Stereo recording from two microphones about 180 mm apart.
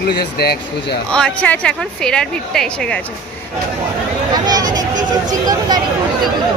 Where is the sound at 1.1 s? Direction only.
5° left (ahead or behind).